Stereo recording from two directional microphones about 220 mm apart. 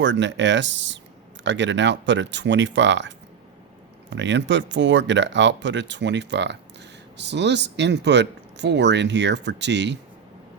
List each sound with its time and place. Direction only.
0.0 s speech: 55° right (ahead or behind)
4.1 s speech: 55° right (ahead or behind)